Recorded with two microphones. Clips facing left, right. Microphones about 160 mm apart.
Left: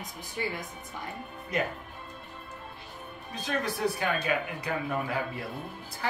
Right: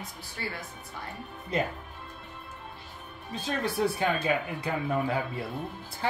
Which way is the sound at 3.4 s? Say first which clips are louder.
Right 1 dB; 30° right (ahead or behind).